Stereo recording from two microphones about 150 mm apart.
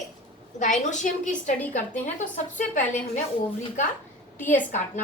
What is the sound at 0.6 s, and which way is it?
A woman's voice, 55° left (ahead or behind).